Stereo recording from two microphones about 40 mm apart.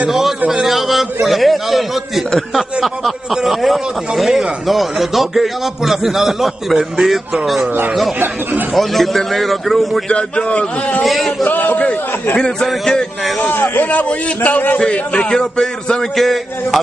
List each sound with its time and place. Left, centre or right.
0.5 s speech: centre
3.4 s speech: centre
8.7 s speech: centre
10.1 s a man's voice: left
11.1 s speech: centre
11.4 s a man's voice: left
12.4 s a man's voice: centre
13.7 s a man's voice: left
14.8 s a man's voice: left
16.2 s speech: centre